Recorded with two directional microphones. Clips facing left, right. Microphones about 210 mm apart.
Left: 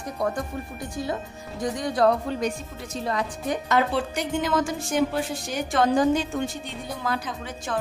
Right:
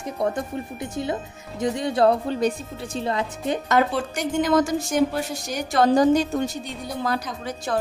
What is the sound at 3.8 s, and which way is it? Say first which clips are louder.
Speech: right 1 dB; 45° right (ahead or behind).